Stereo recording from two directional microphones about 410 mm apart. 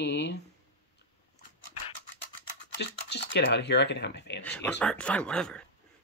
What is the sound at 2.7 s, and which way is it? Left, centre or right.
Speech, left.